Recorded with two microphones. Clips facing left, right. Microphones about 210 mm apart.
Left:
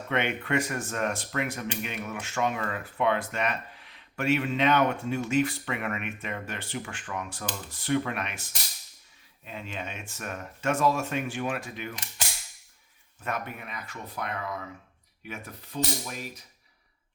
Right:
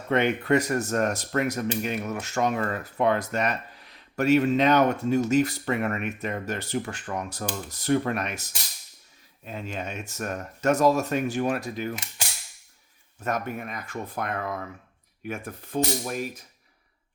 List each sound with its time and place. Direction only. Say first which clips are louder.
0.1 s speech: right 6 dB; 40° right (ahead or behind)
13.2 s speech: right 5 dB; 45° right (ahead or behind)